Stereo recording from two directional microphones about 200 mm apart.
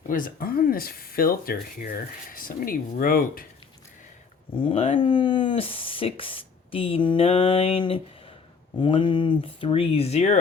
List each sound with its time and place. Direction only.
0.1 s speech: 45° left (ahead or behind)
4.5 s speech: 25° left (ahead or behind)